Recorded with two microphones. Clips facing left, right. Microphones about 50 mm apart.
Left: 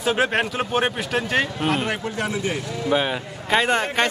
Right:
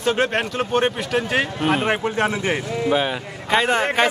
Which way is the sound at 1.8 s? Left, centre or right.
Right.